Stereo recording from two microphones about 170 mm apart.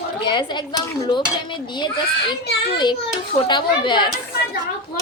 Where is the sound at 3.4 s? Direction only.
25° left (ahead or behind).